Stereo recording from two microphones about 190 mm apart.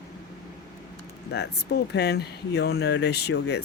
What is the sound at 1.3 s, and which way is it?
Speech, 60° left (ahead or behind).